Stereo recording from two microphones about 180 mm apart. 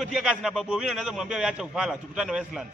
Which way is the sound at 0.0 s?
5° right (ahead or behind).